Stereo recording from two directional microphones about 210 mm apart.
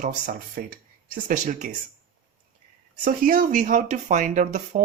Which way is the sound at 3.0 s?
40° right (ahead or behind).